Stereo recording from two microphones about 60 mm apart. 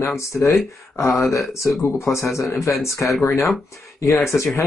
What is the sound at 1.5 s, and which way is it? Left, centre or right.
Speech, left.